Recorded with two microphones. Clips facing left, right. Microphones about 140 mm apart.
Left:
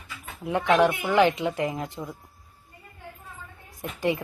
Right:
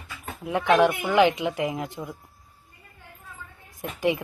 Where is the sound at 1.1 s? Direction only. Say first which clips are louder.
Right 1 dB; 15° right (ahead or behind).